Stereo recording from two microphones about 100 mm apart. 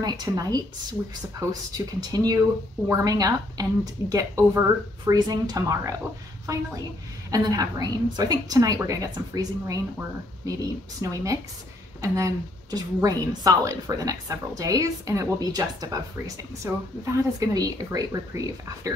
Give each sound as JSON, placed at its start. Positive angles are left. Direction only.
{"t": 0.0, "sound": "a woman's voice", "side_deg": -40}
{"t": 11.0, "sound": "a woman's voice", "side_deg": -35}